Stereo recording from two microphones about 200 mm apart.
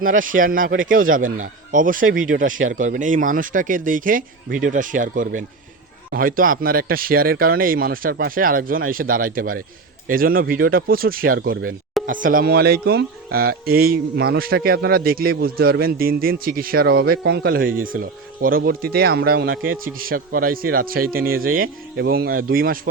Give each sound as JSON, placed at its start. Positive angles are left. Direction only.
{"t": 0.0, "sound": "a man's voice", "side_deg": -45}